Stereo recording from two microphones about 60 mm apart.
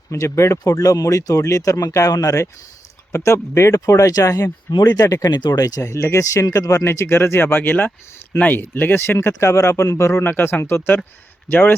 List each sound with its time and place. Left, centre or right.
0.1 s speech: left
0.6 s speech: left
3.2 s speech: left
5.8 s speech: left
6.3 s speech: left
6.8 s speech: left
9.2 s a man's voice: left